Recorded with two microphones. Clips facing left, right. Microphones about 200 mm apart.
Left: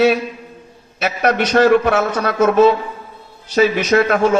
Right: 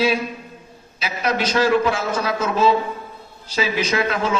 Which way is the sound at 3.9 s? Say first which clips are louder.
Left 8 dB; 50° left (ahead or behind).